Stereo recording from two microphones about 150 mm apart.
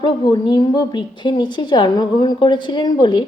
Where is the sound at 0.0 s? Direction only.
30° left (ahead or behind).